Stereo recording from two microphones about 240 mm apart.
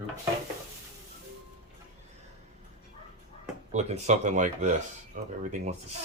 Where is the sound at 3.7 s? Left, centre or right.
Right.